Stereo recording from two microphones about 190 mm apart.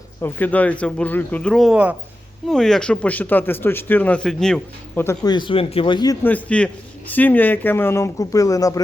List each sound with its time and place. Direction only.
0.2 s speech: 10° left (ahead or behind)
5.0 s a man's voice: 20° left (ahead or behind)
6.2 s speech: 5° left (ahead or behind)